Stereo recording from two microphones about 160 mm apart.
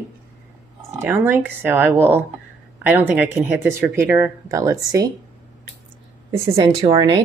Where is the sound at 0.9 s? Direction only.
15° right (ahead or behind).